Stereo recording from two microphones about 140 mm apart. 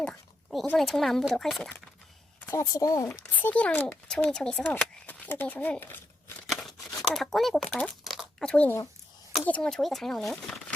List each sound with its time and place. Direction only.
0.0 s speech: 5° left (ahead or behind)
2.5 s speech: 25° left (ahead or behind)
3.1 s speech: 10° left (ahead or behind)
6.5 s scissors: centre (ahead or behind)
7.0 s speech: centre (ahead or behind)